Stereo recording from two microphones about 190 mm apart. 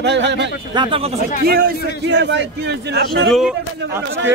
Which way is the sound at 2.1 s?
70° right (ahead or behind).